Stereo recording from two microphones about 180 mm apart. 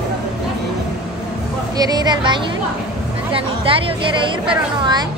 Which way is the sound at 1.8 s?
20° right (ahead or behind).